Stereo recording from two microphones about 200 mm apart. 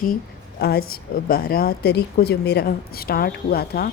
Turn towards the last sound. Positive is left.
turn(degrees=50)  # may be behind; listen again after turning